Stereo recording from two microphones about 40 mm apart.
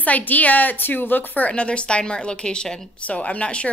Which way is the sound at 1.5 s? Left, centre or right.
Left.